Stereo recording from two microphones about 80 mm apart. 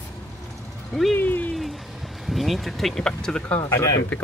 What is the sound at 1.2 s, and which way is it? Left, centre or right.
Speech, left.